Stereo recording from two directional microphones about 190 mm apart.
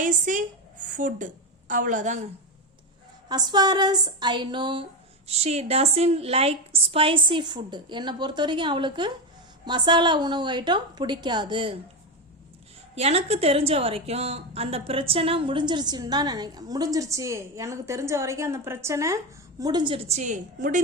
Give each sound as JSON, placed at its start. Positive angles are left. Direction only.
{"t": 0.0, "sound": "a woman's voice", "side_deg": -45}
{"t": 3.2, "sound": "a woman's voice", "side_deg": -20}
{"t": 13.0, "sound": "a woman's voice", "side_deg": -35}